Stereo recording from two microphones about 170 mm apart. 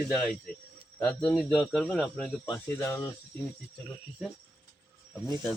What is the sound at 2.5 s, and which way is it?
Speech, 15° left (ahead or behind).